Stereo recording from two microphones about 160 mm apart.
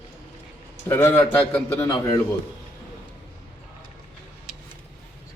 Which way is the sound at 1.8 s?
25° left (ahead or behind).